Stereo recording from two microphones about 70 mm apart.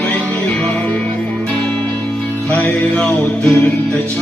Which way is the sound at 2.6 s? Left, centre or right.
Centre.